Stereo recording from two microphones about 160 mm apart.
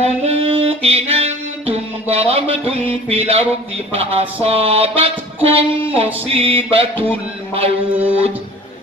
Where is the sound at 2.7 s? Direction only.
40° right (ahead or behind).